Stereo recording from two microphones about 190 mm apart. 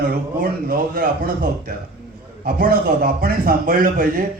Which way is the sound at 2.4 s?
50° right (ahead or behind).